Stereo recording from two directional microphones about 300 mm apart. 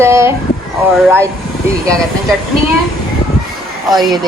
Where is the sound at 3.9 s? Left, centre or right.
Centre.